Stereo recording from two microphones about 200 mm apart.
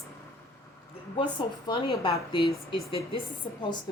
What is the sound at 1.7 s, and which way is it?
Speech, 20° left (ahead or behind).